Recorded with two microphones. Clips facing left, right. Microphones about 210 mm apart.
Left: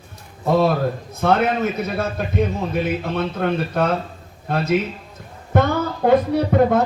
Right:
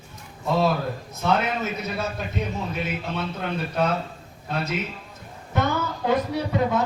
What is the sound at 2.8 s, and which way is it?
A man's voice, 55° left (ahead or behind).